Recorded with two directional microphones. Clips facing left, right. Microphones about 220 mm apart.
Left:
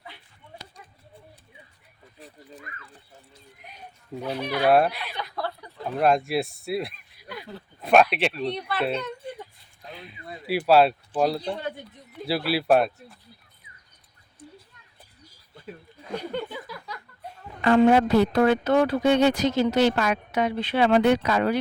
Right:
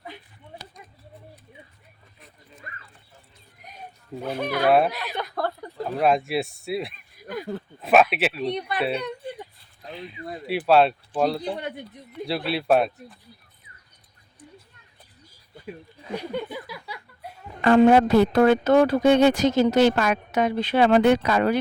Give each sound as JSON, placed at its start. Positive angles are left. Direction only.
{"t": 4.2, "sound": "speech", "side_deg": -50}
{"t": 4.9, "sound": "chuckle", "side_deg": -45}
{"t": 6.0, "sound": "speech", "side_deg": 0}
{"t": 7.2, "sound": "a sound", "side_deg": -45}
{"t": 7.8, "sound": "a sound", "side_deg": 0}
{"t": 8.1, "sound": "speech", "side_deg": -5}
{"t": 8.5, "sound": "a child's voice", "side_deg": -20}
{"t": 9.9, "sound": "speech", "side_deg": 0}
{"t": 16.0, "sound": "chuckle", "side_deg": -10}
{"t": 17.6, "sound": "speech", "side_deg": -50}